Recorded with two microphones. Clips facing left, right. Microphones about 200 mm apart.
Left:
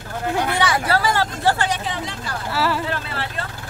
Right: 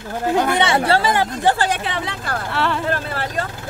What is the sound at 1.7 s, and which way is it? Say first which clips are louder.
Speech: right 2 dB; 60° right (ahead or behind).